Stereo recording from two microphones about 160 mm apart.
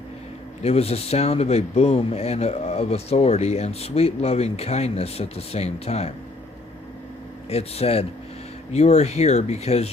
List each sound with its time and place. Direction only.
0.6 s speech: 40° left (ahead or behind)
7.5 s speech: 40° left (ahead or behind)